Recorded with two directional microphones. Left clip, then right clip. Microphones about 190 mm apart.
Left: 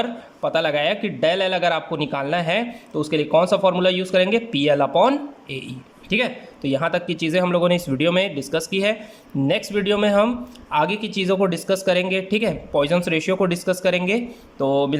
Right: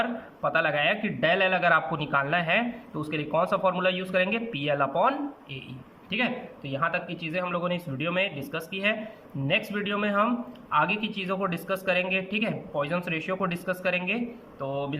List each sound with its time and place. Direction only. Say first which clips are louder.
0.0 s a man's voice: left 4 dB; 25° left (ahead or behind)